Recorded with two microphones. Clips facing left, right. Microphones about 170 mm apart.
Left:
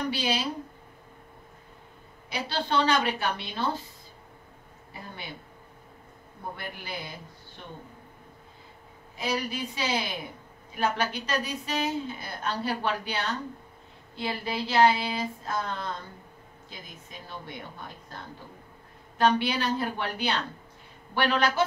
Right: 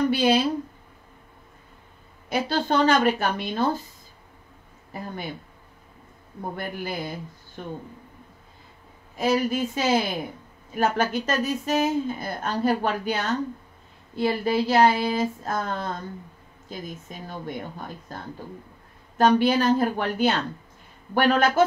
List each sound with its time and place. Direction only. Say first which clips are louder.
0.1 s a woman's voice: right 9 dB; 50° right (ahead or behind)
2.2 s a woman's voice: right 7 dB; 45° right (ahead or behind)
6.5 s a woman's voice: right 8 dB; 45° right (ahead or behind)
9.1 s a woman's voice: right 8 dB; 45° right (ahead or behind)
17.3 s a woman's voice: right 7 dB; 45° right (ahead or behind)
19.1 s a woman's voice: right 6 dB; 45° right (ahead or behind)